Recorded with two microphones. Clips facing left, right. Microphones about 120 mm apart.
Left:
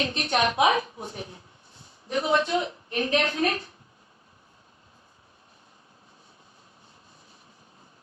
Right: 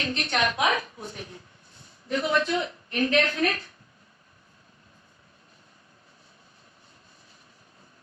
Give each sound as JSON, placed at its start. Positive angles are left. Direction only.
{"t": 0.1, "sound": "a woman's voice", "side_deg": 25}